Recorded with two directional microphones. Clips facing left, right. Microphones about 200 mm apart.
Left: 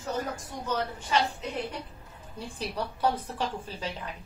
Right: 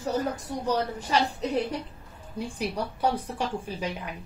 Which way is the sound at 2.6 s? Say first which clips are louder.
Right 1 dB; 15° right (ahead or behind).